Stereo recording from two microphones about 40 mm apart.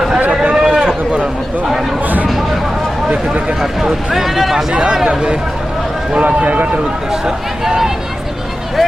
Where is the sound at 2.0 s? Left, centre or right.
Right.